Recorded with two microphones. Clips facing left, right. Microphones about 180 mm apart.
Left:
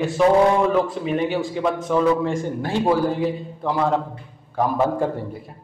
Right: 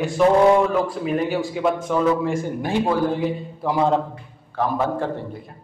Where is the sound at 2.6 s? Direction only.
15° right (ahead or behind).